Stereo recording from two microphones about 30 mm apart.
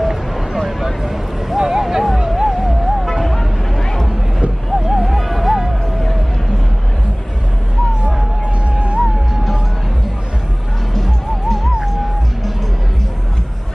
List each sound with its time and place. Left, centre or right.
0.0 s a sound: centre
2.1 s music: centre
2.4 s music: centre
8.7 s music: right
9.0 s music: centre
11.0 s music: centre